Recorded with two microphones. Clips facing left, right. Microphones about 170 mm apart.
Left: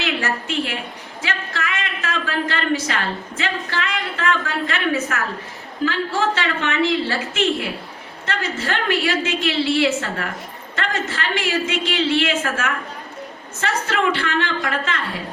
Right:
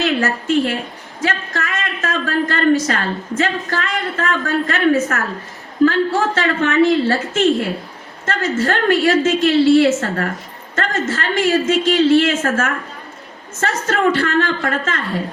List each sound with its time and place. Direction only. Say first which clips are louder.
0.0 s a woman's voice: right 6 dB; 45° right (ahead or behind)